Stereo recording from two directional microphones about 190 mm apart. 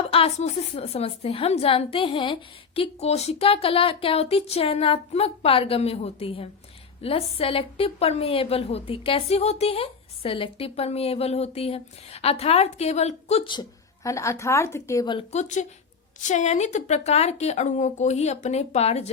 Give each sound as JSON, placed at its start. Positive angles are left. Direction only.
{"t": 0.1, "sound": "a woman's voice", "side_deg": 35}
{"t": 15.3, "sound": "a woman's voice", "side_deg": 40}